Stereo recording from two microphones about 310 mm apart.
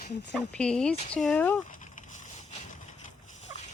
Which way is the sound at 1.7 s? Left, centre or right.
Left.